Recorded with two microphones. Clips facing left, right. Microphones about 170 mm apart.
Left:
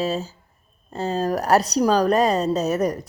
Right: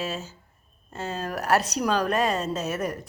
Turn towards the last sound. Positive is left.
turn(degrees=40)  # may be behind; listen again after turning